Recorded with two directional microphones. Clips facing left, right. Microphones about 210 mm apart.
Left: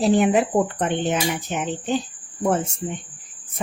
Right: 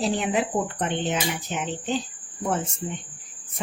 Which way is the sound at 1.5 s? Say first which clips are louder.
Left 3 dB; 55° left (ahead or behind).